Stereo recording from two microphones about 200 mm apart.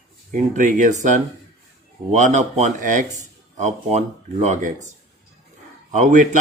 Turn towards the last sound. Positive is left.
turn(degrees=-35)  # may be behind; listen again after turning